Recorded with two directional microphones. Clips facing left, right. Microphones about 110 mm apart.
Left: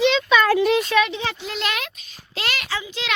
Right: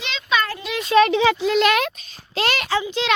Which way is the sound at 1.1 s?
65° right (ahead or behind).